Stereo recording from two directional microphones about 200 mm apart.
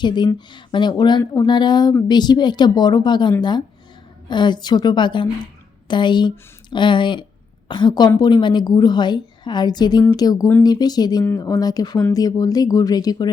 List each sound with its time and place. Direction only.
0.0 s a woman's voice: 20° left (ahead or behind)